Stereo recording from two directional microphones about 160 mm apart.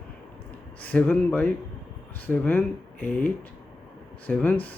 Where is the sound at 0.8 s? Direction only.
10° left (ahead or behind).